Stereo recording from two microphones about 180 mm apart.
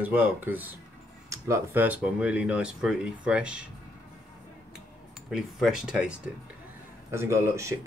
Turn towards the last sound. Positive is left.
turn(degrees=-15)  # may be behind; listen again after turning